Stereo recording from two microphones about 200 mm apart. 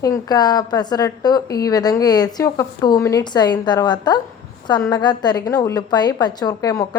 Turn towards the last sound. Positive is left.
turn(degrees=15)  # may be behind; listen again after turning